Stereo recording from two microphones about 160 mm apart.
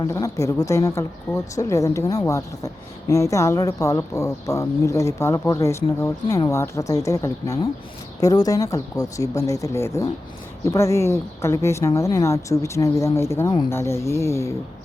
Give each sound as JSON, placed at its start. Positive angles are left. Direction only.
{"t": 0.0, "sound": "a woman's voice", "side_deg": 20}